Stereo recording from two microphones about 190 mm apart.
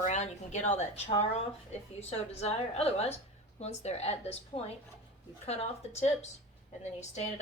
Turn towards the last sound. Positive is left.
turn(degrees=35)  # may be behind; listen again after turning